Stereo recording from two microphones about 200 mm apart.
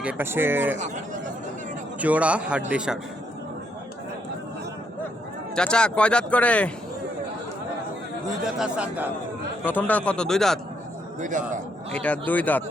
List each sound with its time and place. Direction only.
0.0 s a man's voice: 10° right (ahead or behind)
2.0 s a man's voice: 5° right (ahead or behind)
5.5 s speech: 5° left (ahead or behind)
8.5 s speech: 5° right (ahead or behind)
9.6 s speech: 10° left (ahead or behind)
11.2 s speech: 40° right (ahead or behind)
11.9 s speech: 5° left (ahead or behind)